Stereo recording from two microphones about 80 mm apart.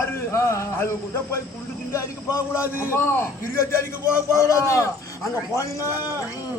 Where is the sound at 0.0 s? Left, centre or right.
Left.